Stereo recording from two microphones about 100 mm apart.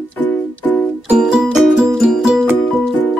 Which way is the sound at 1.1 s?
5° right (ahead or behind).